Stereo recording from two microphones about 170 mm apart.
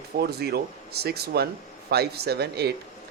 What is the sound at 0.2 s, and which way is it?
Speech, 70° right (ahead or behind).